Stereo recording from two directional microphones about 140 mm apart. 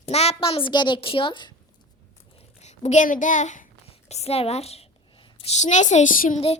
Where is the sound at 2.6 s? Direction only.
55° left (ahead or behind).